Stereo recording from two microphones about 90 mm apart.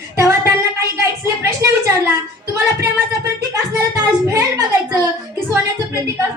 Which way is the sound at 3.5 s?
35° right (ahead or behind).